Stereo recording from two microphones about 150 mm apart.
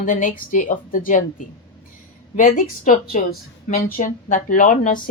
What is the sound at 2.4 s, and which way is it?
A woman's voice, 60° left (ahead or behind).